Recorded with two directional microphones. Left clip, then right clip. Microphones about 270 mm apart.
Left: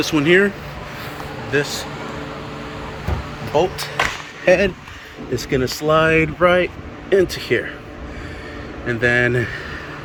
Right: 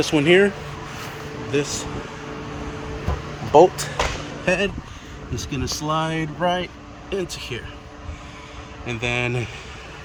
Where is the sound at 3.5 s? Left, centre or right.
Centre.